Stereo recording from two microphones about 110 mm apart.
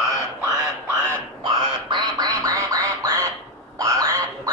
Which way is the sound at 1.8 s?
40° right (ahead or behind).